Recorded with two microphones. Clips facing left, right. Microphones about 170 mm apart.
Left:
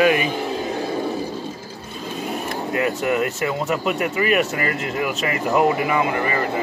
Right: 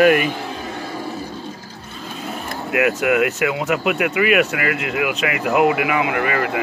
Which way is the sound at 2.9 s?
75° right (ahead or behind).